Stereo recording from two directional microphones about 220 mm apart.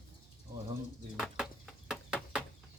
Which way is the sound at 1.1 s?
Centre (ahead or behind).